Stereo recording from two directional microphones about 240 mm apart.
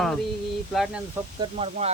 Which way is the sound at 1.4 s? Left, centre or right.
Right.